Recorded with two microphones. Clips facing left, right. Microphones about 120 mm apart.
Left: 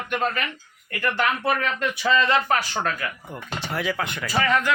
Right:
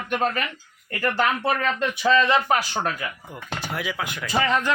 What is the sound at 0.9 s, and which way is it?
Speech, 35° right (ahead or behind).